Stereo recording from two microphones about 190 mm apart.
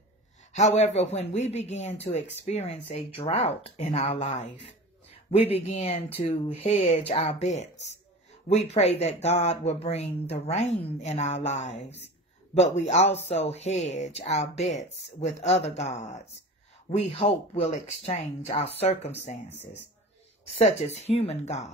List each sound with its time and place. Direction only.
0.5 s speech: 35° left (ahead or behind)
20.4 s speech: 35° left (ahead or behind)